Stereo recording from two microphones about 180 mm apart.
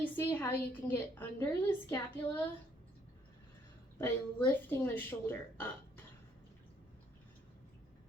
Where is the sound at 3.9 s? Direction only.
10° left (ahead or behind).